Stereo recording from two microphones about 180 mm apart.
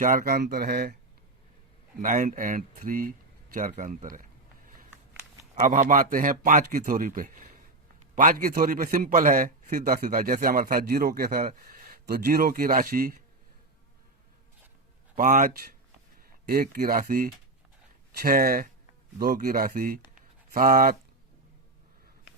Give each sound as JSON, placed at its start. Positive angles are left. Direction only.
{"t": 0.0, "sound": "speech", "side_deg": -50}
{"t": 2.0, "sound": "a man's voice", "side_deg": -45}
{"t": 3.7, "sound": "a sound", "side_deg": -45}
{"t": 5.6, "sound": "a man's voice", "side_deg": -45}
{"t": 15.1, "sound": "speech", "side_deg": -45}
{"t": 16.5, "sound": "a man's voice", "side_deg": -55}